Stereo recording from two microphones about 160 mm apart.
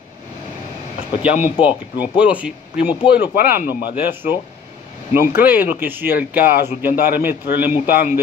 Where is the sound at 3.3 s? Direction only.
75° left (ahead or behind).